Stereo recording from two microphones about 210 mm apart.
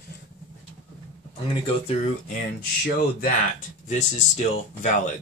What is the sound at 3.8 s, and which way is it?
Speech, 35° left (ahead or behind).